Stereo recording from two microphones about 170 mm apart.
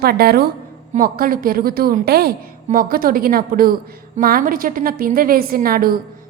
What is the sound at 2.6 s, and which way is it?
A woman's voice, 55° right (ahead or behind).